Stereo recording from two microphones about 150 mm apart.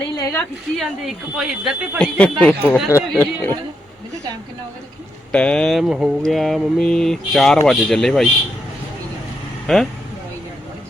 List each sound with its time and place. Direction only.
0.1 s a sound: 25° left (ahead or behind)
0.8 s mantra: 5° right (ahead or behind)
2.0 s speech: 10° left (ahead or behind)
5.3 s mantra: 10° left (ahead or behind)
9.7 s mantra: centre (ahead or behind)